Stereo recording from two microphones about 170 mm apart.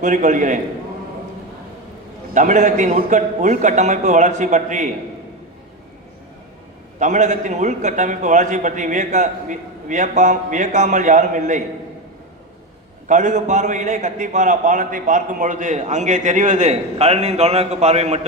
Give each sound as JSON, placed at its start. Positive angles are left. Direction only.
{"t": 0.0, "sound": "a man's voice", "side_deg": -45}
{"t": 2.3, "sound": "a man's voice", "side_deg": -45}
{"t": 7.0, "sound": "a man's voice", "side_deg": -45}
{"t": 13.1, "sound": "a man's voice", "side_deg": -45}